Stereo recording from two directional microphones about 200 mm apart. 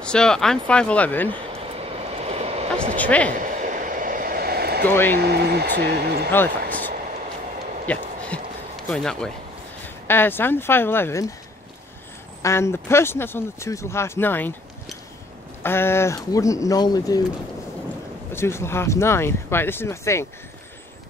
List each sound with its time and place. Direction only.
0.0 s speech: 5° left (ahead or behind)
2.1 s vehicle: 30° right (ahead or behind)
3.0 s speech: 5° left (ahead or behind)
3.3 s vehicle: 40° right (ahead or behind)
4.8 s speech: 10° left (ahead or behind)
5.2 s speech: 55° right (ahead or behind)
6.3 s speech: 10° left (ahead or behind)
7.8 s a sound: 5° left (ahead or behind)
8.9 s speech: 5° left (ahead or behind)
12.4 s speech: 15° left (ahead or behind)
15.6 s speech: 10° left (ahead or behind)
18.3 s speech: 10° left (ahead or behind)